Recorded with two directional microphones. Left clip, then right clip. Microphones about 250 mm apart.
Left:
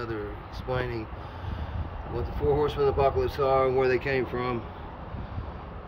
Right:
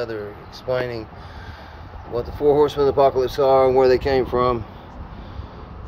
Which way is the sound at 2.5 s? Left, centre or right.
Centre.